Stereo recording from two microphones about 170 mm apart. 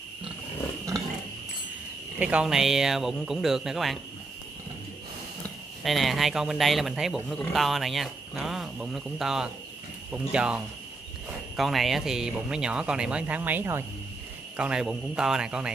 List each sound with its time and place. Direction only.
2.1 s a man's voice: 5° right (ahead or behind)
5.9 s a man's voice: centre (ahead or behind)